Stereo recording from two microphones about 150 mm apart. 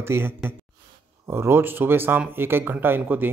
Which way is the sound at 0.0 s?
15° right (ahead or behind).